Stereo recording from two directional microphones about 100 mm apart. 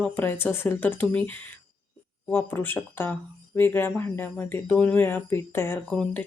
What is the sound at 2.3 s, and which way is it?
Speech, 20° left (ahead or behind).